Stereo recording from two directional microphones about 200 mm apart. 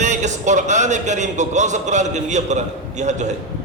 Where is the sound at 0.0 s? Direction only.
35° right (ahead or behind).